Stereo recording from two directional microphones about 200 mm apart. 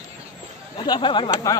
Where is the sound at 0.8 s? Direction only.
25° left (ahead or behind).